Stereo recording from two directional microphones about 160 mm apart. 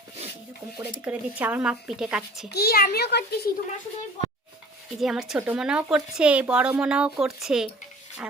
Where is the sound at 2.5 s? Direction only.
80° left.